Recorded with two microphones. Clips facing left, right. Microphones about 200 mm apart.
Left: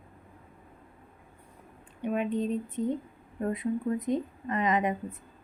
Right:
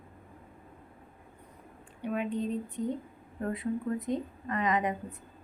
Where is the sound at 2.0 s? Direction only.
20° left (ahead or behind).